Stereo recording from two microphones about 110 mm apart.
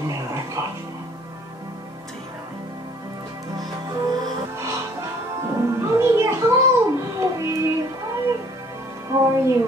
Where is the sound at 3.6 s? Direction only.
35° right (ahead or behind).